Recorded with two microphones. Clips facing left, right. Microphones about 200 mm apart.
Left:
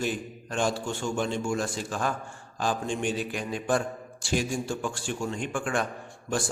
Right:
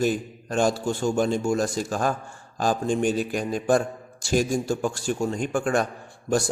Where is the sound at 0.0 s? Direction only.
40° right (ahead or behind).